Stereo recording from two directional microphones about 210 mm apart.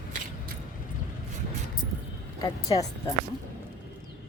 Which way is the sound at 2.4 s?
15° left (ahead or behind).